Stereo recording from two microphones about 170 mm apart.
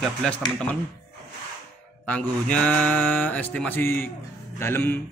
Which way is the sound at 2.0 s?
5° left (ahead or behind).